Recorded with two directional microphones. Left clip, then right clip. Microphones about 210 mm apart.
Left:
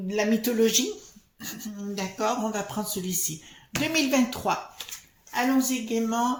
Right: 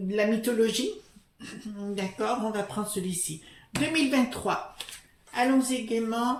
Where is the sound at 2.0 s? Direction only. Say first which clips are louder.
Left 2 dB; 30° left (ahead or behind).